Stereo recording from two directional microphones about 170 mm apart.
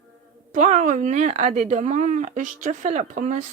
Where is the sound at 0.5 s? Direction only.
45° right (ahead or behind).